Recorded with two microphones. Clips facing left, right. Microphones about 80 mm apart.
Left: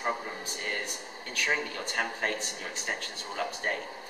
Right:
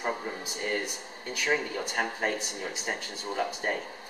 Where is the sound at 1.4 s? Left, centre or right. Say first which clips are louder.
Right 3 dB; centre.